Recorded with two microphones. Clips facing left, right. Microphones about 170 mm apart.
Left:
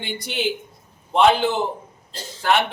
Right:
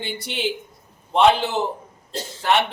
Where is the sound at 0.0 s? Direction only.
Centre (ahead or behind).